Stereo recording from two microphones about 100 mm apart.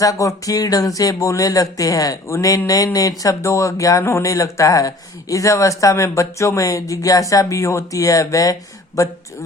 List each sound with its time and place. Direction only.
0.0 s speech: 35° left (ahead or behind)